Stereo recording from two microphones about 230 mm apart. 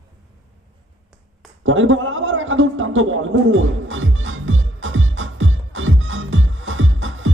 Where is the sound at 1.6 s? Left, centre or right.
Right.